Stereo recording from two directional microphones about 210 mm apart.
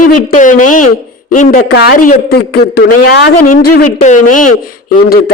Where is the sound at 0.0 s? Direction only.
40° left (ahead or behind).